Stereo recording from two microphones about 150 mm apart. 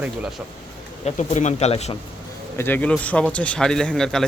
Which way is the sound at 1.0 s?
50° left (ahead or behind).